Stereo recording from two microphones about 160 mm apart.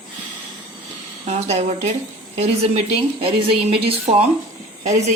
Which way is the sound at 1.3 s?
45° right (ahead or behind).